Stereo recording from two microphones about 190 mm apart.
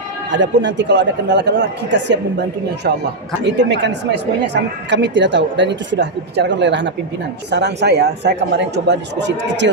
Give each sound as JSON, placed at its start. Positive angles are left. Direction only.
{"t": 0.3, "sound": "speech", "side_deg": -70}
{"t": 3.4, "sound": "speech", "side_deg": -65}